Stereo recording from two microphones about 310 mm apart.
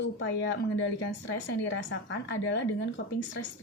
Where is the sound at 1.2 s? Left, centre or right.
Left.